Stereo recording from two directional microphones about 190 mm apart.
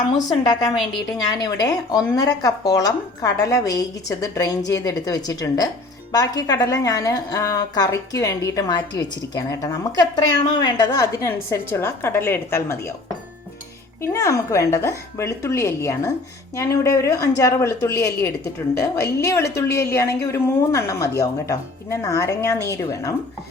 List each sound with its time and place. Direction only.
0.3 s a woman's voice: 20° left (ahead or behind)
14.0 s a woman's voice: 15° left (ahead or behind)